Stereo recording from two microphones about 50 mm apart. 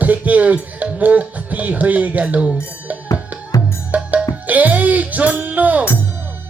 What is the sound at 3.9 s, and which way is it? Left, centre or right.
Music, right.